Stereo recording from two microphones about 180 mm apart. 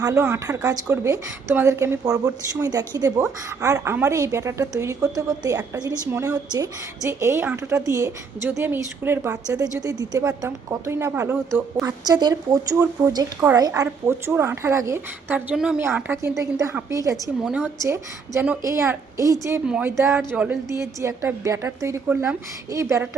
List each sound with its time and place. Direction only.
0.0 s a woman's voice: 15° right (ahead or behind)
11.9 s a woman's voice: 20° right (ahead or behind)
19.6 s a woman's voice: 5° right (ahead or behind)